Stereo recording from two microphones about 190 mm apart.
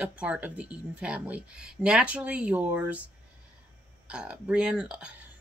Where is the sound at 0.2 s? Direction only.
5° right (ahead or behind).